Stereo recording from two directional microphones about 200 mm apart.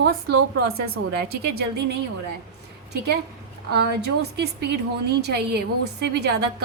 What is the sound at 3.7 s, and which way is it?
A woman's voice, 55° right (ahead or behind).